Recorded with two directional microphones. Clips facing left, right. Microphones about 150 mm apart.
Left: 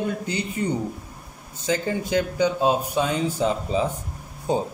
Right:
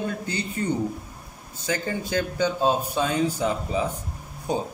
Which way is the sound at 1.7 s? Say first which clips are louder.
Left 3 dB; 20° left (ahead or behind).